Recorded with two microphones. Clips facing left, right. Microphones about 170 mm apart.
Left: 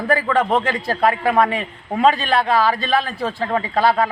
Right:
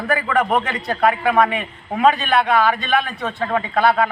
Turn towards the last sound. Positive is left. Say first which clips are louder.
# even
turn(degrees=30)  # may be behind; listen again after turning